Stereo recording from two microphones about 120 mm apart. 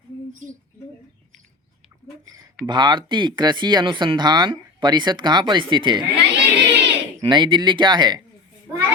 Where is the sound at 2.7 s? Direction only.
35° right (ahead or behind).